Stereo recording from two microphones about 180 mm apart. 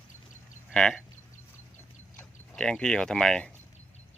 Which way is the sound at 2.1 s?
10° left (ahead or behind).